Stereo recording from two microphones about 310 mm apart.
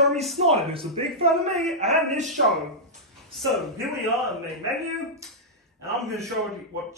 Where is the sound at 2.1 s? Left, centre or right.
Right.